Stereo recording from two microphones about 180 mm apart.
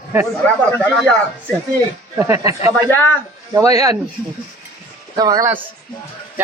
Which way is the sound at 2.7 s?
10° left (ahead or behind).